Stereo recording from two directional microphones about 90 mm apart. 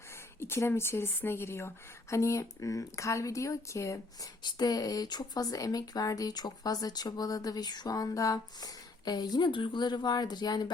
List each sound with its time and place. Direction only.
0.3 s speech: 25° left (ahead or behind)
4.4 s speech: 50° left (ahead or behind)